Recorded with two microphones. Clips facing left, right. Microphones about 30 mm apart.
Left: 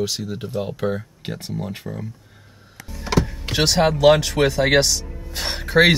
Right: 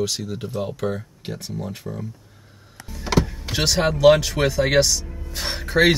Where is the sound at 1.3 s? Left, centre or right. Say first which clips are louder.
Left 2 dB; left.